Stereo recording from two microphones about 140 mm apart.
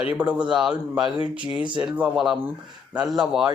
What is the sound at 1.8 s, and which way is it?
A man's voice, 5° right (ahead or behind).